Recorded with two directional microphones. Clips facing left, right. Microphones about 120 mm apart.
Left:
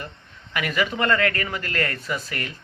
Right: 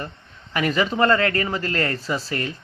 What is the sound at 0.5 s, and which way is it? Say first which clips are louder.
A man's voice: right 3 dB; 35° right (ahead or behind).